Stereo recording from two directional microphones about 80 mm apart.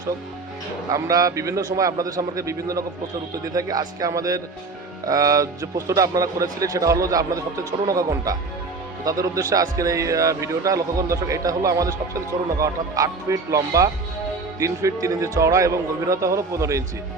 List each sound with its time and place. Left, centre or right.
0.9 s a man's voice: right